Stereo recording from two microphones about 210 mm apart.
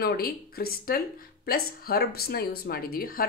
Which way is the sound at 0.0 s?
45° left (ahead or behind).